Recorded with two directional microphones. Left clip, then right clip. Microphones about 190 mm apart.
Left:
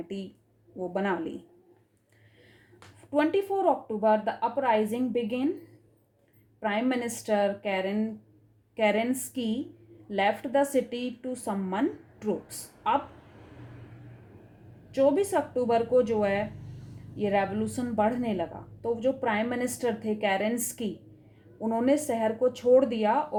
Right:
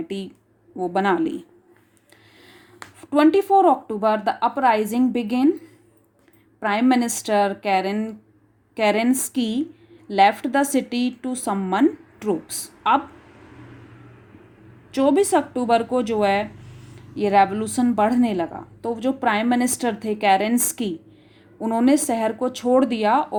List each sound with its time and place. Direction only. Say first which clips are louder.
0.9 s speech: right 10 dB; 25° right (ahead or behind)
3.1 s speech: right 10 dB; 25° right (ahead or behind)
6.6 s speech: right 9 dB; 30° right (ahead or behind)
14.9 s speech: right 6 dB; 25° right (ahead or behind)